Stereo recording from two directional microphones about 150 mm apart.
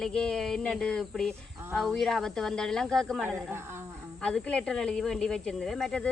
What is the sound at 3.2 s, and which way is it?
Speech, 15° right (ahead or behind).